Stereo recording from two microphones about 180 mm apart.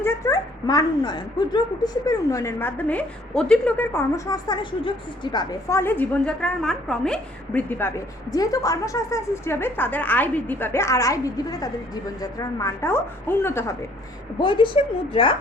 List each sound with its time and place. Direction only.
0.0 s speech: 20° left (ahead or behind)
12.2 s speech: 20° left (ahead or behind)
14.3 s a woman's voice: 25° left (ahead or behind)